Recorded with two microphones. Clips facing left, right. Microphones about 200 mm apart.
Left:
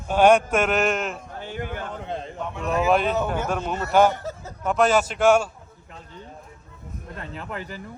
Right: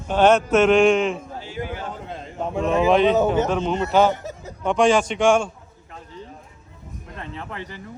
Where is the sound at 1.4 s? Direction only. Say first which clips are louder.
Right 1 dB; 55° left (ahead or behind).